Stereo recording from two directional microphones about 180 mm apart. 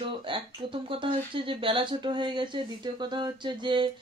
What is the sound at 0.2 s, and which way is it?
Speech, 30° right (ahead or behind).